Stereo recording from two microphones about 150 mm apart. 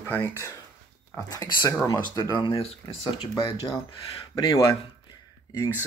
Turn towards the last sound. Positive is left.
turn(degrees=25)  # may be behind; listen again after turning